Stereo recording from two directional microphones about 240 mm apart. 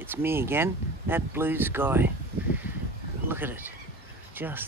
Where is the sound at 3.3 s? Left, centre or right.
Centre.